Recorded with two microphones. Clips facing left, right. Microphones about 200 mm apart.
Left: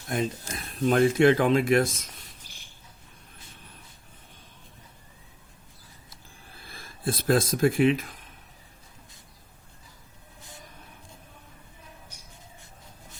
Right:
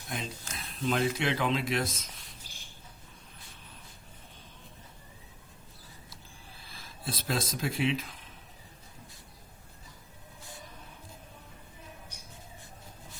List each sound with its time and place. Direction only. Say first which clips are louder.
0.1 s speech: left 10 dB; 50° left (ahead or behind)
6.7 s speech: left 9 dB; 50° left (ahead or behind)